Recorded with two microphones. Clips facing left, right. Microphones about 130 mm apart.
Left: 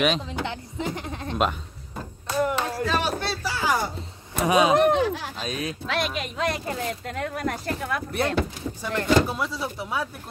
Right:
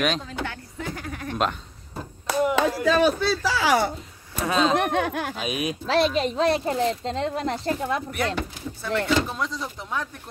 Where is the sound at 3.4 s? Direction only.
85° right.